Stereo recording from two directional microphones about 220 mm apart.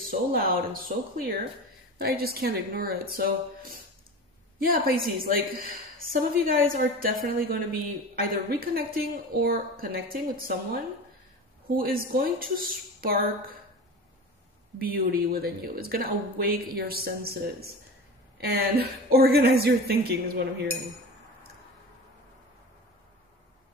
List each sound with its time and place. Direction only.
0.1 s speech: 40° right (ahead or behind)
14.8 s speech: 45° right (ahead or behind)